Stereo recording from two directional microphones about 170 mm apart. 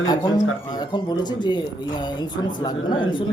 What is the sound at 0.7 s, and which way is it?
A man's voice, 25° left (ahead or behind).